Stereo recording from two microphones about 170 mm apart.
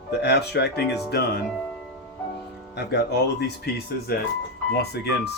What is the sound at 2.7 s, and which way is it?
Speech, 80° left.